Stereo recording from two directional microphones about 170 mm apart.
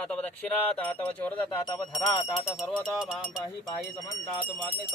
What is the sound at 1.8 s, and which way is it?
Speech, 30° left (ahead or behind).